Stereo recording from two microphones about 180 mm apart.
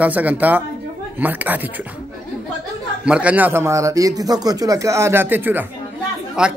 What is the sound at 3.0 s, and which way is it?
A man's voice, 5° right (ahead or behind).